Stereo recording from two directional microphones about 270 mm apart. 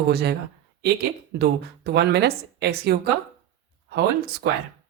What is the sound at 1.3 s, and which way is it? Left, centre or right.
Speech, right.